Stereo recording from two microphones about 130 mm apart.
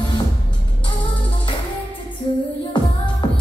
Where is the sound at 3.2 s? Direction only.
35° left (ahead or behind).